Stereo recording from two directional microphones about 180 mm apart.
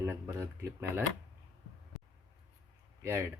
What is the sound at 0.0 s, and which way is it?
Speech, 15° right (ahead or behind).